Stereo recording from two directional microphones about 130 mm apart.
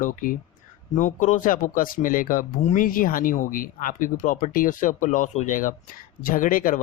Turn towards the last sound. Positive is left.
turn(degrees=90)